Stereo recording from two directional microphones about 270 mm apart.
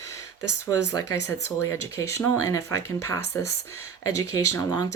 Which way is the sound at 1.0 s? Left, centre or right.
Left.